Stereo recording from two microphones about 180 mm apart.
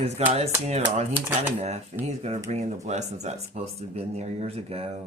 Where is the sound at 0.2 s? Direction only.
35° right (ahead or behind).